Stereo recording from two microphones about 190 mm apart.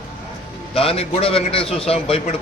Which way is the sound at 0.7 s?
30° left (ahead or behind).